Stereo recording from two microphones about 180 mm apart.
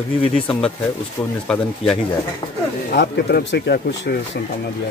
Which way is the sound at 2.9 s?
65° left (ahead or behind).